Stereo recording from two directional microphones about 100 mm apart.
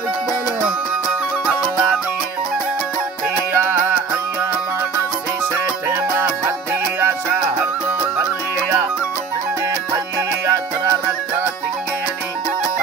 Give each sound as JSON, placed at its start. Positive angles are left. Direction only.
{"t": 3.5, "sound": "music", "side_deg": -25}
{"t": 5.9, "sound": "music", "side_deg": -25}